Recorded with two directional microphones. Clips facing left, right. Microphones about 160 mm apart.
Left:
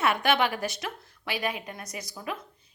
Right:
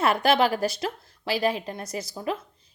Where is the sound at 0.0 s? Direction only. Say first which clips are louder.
Right 4 dB; 35° right (ahead or behind).